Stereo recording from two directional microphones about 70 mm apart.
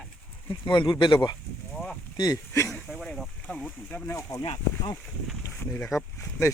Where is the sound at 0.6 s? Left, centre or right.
Left.